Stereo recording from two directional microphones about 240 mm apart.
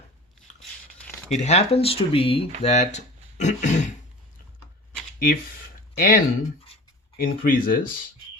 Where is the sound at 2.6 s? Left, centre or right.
Left.